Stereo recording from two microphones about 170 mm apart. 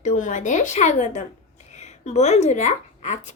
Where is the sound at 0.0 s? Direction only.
45° left (ahead or behind).